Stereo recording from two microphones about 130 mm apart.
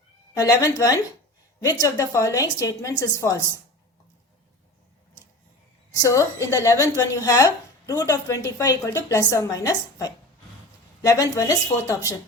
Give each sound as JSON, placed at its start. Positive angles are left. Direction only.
{"t": 0.3, "sound": "a woman's voice", "side_deg": 25}
{"t": 5.9, "sound": "a woman's voice", "side_deg": 25}